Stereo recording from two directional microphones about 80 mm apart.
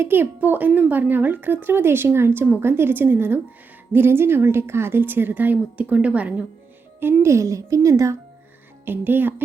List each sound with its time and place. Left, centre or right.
0.0 s speech: right
7.0 s a woman's voice: right
8.8 s speech: right